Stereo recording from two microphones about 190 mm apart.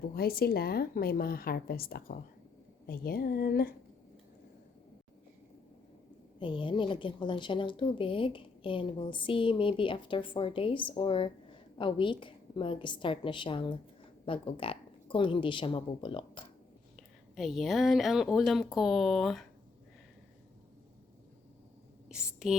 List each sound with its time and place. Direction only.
0.1 s a woman's voice: 55° left (ahead or behind)
6.4 s a woman's voice: 25° left (ahead or behind)
17.3 s speech: centre (ahead or behind)
22.1 s speech: 5° right (ahead or behind)